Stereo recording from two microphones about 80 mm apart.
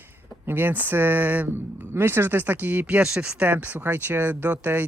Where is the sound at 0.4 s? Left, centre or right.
Right.